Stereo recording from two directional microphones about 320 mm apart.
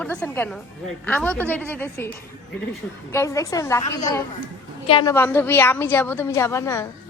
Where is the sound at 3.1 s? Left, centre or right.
Centre.